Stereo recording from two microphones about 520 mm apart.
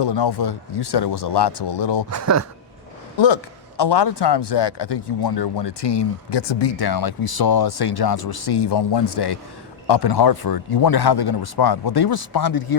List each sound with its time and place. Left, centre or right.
0.0 s speech: left
2.0 s speech: right
3.2 s speech: left